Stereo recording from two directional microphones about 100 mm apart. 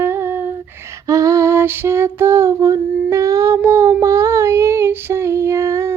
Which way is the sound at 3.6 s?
25° right (ahead or behind).